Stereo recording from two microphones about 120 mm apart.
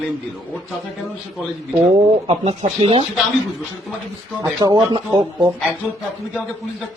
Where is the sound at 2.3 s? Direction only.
50° right (ahead or behind).